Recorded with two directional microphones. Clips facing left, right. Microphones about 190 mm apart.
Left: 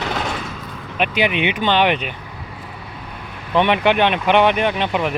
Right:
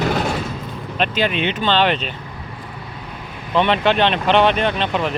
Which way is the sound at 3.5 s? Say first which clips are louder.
Left 1 dB; 15° left (ahead or behind).